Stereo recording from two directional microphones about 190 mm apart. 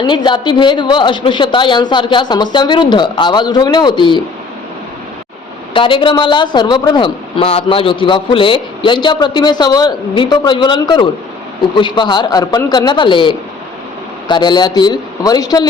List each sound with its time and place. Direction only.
0.0 s a man's voice: 25° left (ahead or behind)
5.7 s a man's voice: 25° left (ahead or behind)